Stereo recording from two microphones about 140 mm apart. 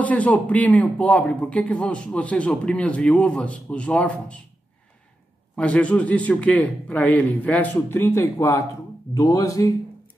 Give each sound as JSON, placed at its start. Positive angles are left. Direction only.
{"t": 0.0, "sound": "speech", "side_deg": 10}
{"t": 5.6, "sound": "speech", "side_deg": 10}